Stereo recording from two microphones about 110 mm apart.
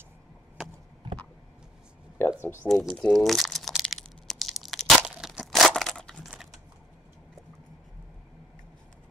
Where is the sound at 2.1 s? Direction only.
20° left (ahead or behind).